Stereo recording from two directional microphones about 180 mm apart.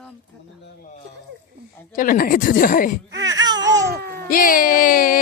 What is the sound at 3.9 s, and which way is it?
Baby cry, 60° right (ahead or behind).